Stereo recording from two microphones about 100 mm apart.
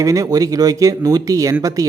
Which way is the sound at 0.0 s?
35° right (ahead or behind).